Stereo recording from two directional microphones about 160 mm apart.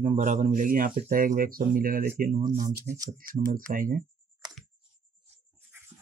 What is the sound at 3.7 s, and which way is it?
Speech, 60° right (ahead or behind).